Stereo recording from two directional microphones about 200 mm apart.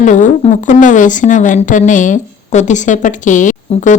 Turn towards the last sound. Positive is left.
turn(degrees=40)  # may be behind; listen again after turning